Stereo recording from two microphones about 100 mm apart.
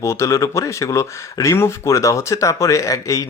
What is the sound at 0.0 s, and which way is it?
Speech, 30° left (ahead or behind).